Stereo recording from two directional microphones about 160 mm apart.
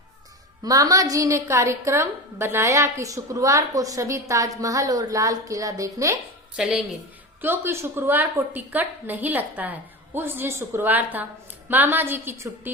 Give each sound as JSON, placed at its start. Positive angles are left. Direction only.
{"t": 0.6, "sound": "a woman's voice", "side_deg": -20}
{"t": 6.6, "sound": "a woman's voice", "side_deg": -5}